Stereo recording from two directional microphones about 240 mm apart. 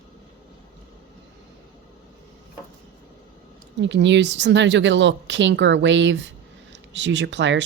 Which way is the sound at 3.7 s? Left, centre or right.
Right.